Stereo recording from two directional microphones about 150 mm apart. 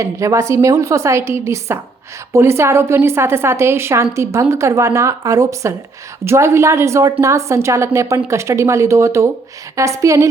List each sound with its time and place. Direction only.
0.0 s a woman's voice: 20° right (ahead or behind)